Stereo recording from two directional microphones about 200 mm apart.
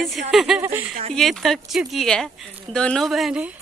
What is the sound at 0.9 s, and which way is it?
Speech, 35° right (ahead or behind).